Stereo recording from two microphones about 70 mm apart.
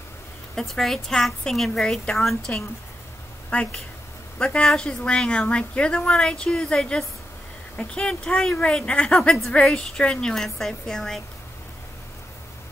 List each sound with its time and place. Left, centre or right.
0.6 s a woman's voice: centre
3.5 s a woman's voice: centre